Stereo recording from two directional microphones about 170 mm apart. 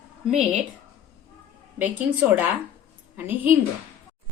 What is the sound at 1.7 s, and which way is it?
Speech, 10° right (ahead or behind).